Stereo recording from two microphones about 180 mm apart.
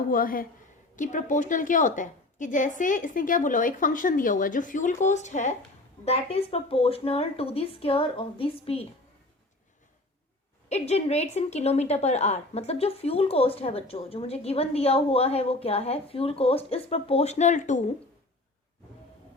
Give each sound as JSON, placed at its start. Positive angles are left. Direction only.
{"t": 0.1, "sound": "a woman's voice", "side_deg": 50}
{"t": 10.7, "sound": "speech", "side_deg": 35}